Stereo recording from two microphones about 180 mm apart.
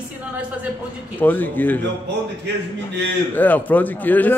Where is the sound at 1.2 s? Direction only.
10° left (ahead or behind).